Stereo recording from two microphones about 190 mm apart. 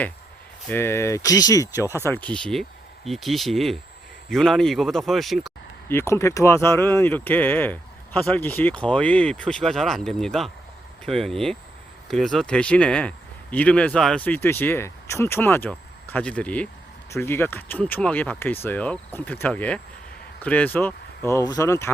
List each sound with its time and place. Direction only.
0.7 s speech: 15° left (ahead or behind)
5.9 s speech: 15° left (ahead or behind)